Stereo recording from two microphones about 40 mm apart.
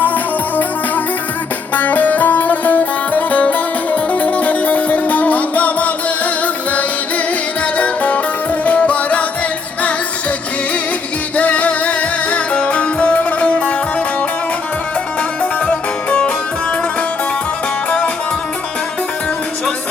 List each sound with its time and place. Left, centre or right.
0.0 s music: left
7.8 s music: left
11.3 s music: left
15.6 s music: left